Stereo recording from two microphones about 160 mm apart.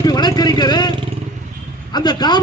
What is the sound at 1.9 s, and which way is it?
Speech, 25° left (ahead or behind).